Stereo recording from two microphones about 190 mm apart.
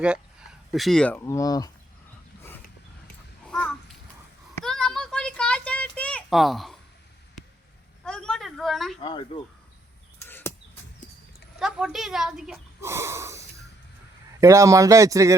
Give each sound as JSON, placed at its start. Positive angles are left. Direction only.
{"t": 0.7, "sound": "speech", "side_deg": 0}
{"t": 3.5, "sound": "babbling", "side_deg": 5}
{"t": 4.6, "sound": "a sound", "side_deg": 5}
{"t": 8.0, "sound": "a sound", "side_deg": 5}
{"t": 9.0, "sound": "speech", "side_deg": 25}
{"t": 10.2, "sound": "a sound", "side_deg": 10}
{"t": 11.6, "sound": "speech", "side_deg": 0}
{"t": 12.8, "sound": "speech", "side_deg": -15}
{"t": 14.4, "sound": "speech", "side_deg": -15}